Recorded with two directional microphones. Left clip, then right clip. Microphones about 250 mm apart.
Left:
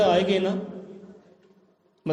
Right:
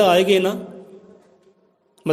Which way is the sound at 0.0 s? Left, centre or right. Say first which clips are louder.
Right 6 dB; right.